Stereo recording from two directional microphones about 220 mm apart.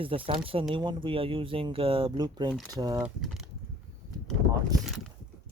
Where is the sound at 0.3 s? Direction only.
25° right (ahead or behind).